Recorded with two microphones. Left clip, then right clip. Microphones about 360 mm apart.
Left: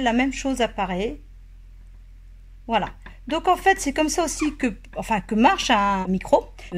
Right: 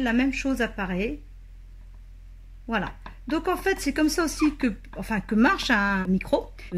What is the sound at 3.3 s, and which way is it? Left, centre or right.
A woman's voice, left.